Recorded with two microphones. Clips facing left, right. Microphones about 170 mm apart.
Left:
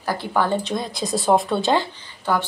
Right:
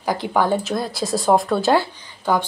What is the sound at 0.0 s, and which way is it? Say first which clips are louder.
Speech: right 2 dB; 15° right (ahead or behind).